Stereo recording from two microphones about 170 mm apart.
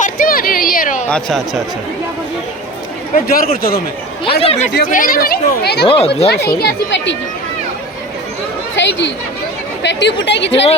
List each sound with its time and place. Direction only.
0.0 s a sound: 55° left (ahead or behind)
1.1 s speech: centre (ahead or behind)
3.2 s speech: 60° left (ahead or behind)
4.4 s speech: 40° left (ahead or behind)
4.9 s speech: 55° left (ahead or behind)
5.8 s speech: 30° left (ahead or behind)
6.2 s speech: 70° left (ahead or behind); by 7.2 s 90° left
8.7 s speech: 90° left